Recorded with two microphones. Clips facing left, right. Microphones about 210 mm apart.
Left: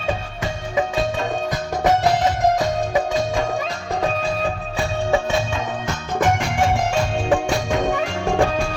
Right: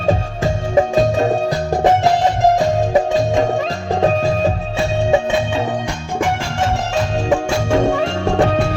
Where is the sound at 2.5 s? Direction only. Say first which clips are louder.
Right 5 dB; 25° right (ahead or behind).